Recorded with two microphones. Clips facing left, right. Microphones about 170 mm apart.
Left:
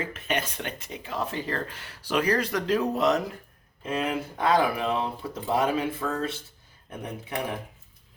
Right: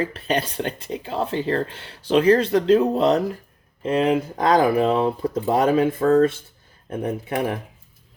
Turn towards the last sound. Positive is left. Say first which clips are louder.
# right 10 dB
turn(degrees=-50)  # may be behind; listen again after turning